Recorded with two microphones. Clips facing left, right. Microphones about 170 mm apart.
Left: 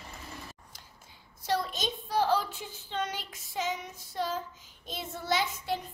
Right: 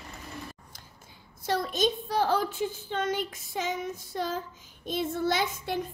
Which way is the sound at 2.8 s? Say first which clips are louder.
Even; 50° right (ahead or behind).